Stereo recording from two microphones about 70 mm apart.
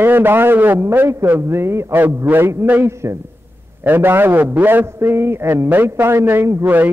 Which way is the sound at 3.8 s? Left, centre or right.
Right.